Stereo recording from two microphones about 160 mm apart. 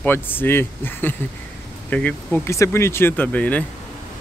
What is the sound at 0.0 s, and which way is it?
Speech, 10° left (ahead or behind).